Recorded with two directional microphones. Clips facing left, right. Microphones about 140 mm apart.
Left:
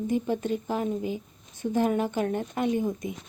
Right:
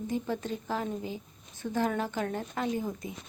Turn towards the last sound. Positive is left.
turn(degrees=20)  # may be behind; listen again after turning